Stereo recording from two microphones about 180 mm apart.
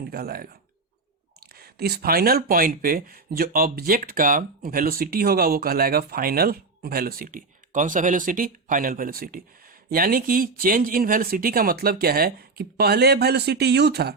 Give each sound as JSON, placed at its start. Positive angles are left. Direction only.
{"t": 0.0, "sound": "speech", "side_deg": -60}
{"t": 1.5, "sound": "speech", "side_deg": -60}